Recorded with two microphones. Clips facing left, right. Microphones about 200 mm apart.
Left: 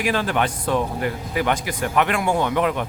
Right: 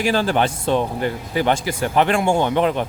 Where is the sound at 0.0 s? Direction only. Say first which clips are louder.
Right 3 dB; 30° right (ahead or behind).